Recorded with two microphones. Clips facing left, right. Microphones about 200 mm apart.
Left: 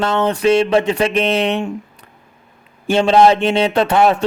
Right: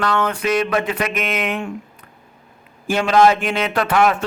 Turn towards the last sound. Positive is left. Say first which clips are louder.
# left 3 dB
turn(degrees=30)  # may be behind; listen again after turning